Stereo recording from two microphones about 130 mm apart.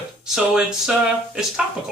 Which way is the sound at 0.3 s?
5° right (ahead or behind).